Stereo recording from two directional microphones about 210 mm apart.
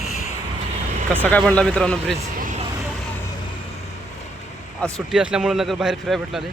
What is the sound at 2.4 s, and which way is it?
Vehicle, 35° right (ahead or behind).